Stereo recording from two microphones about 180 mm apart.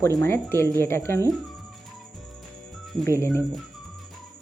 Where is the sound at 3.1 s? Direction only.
15° left (ahead or behind).